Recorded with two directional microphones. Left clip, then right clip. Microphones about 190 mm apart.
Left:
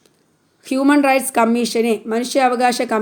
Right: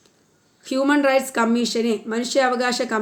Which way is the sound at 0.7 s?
35° left (ahead or behind).